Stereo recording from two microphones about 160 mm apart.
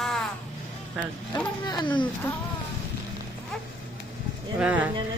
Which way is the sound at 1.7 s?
30° left (ahead or behind).